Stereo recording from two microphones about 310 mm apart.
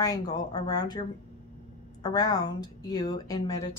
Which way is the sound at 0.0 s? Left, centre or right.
Centre.